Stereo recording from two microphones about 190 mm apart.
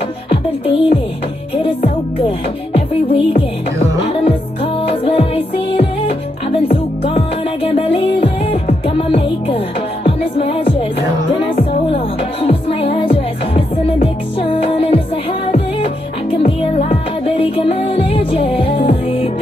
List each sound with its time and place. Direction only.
0.3 s music: 30° left (ahead or behind)